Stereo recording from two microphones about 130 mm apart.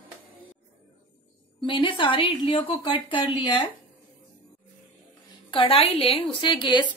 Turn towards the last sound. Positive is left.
turn(degrees=35)  # may be behind; listen again after turning